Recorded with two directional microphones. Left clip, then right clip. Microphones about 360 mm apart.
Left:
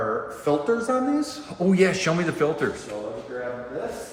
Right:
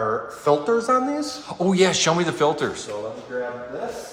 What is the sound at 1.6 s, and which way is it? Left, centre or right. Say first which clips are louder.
A man's voice: right 2 dB; centre.